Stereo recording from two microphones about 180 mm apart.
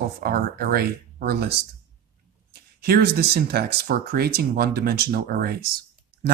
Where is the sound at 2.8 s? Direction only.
60° right (ahead or behind).